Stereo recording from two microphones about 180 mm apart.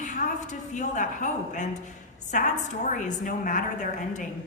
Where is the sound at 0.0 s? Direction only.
40° left (ahead or behind).